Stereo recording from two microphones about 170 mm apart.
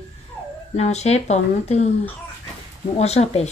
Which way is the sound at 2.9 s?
40° left (ahead or behind).